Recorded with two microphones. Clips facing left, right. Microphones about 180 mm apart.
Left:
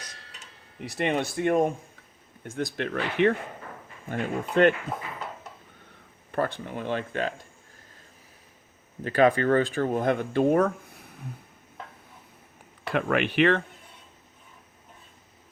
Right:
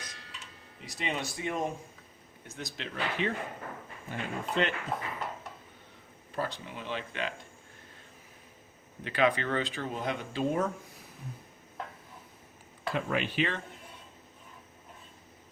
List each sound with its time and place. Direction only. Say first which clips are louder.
0.0 s tick-tock: even; 40° left (ahead or behind)
2.4 s speech: left 11 dB; 50° left (ahead or behind)
6.3 s speech: left 7 dB; 55° left (ahead or behind)
9.0 s speech: left 7 dB; 45° left (ahead or behind); by 10.7 s 60° left (ahead or behind)
12.8 s speech: left 6 dB; 65° left (ahead or behind)